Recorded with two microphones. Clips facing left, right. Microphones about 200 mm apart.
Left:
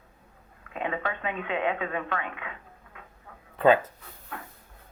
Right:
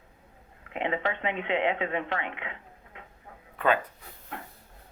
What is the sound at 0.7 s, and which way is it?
Speech, 25° right (ahead or behind).